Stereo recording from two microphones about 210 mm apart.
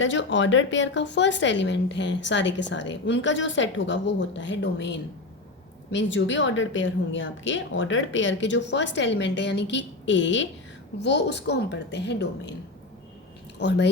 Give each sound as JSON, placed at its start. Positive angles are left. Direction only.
{"t": 0.0, "sound": "speech", "side_deg": 65}
{"t": 13.6, "sound": "speech", "side_deg": 55}